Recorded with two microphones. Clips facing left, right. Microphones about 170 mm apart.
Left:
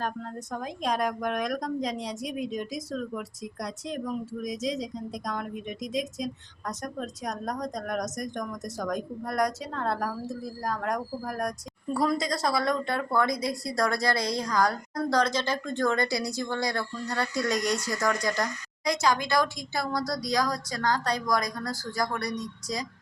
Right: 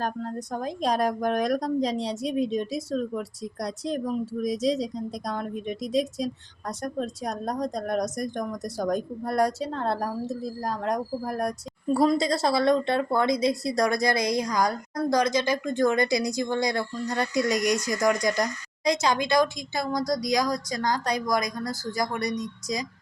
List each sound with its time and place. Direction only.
0.0 s speech: 35° right (ahead or behind); by 22.9 s 10° right (ahead or behind)